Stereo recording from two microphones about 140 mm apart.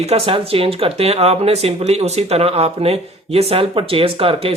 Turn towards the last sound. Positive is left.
turn(degrees=-40)  # may be behind; listen again after turning